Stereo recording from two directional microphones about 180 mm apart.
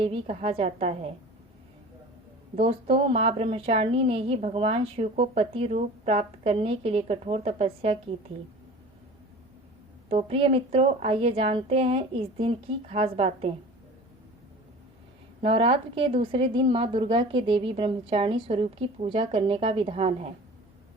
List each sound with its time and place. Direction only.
0.0 s a woman's voice: 30° right (ahead or behind)
2.6 s a woman's voice: 30° right (ahead or behind)
10.1 s a woman's voice: 30° right (ahead or behind)
15.4 s a woman's voice: 30° right (ahead or behind)